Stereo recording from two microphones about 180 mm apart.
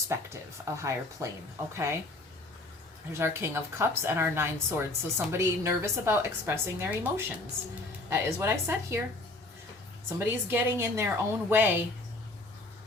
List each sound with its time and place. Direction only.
0.1 s a woman's voice: 15° right (ahead or behind)
3.1 s a woman's voice: 15° right (ahead or behind)
10.2 s a woman's voice: 10° right (ahead or behind)